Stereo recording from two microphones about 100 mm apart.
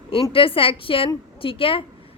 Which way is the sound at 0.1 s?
65° left (ahead or behind).